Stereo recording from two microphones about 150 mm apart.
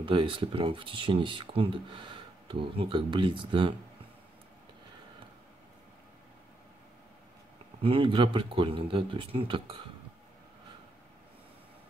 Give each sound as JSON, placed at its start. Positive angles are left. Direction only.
{"t": 0.0, "sound": "speech", "side_deg": -35}
{"t": 7.8, "sound": "speech", "side_deg": -35}